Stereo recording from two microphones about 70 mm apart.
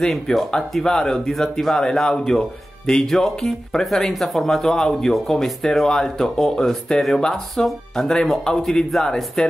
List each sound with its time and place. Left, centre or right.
0.0 s speech: centre